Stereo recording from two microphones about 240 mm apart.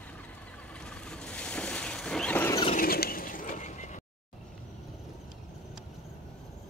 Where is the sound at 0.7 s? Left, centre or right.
Centre.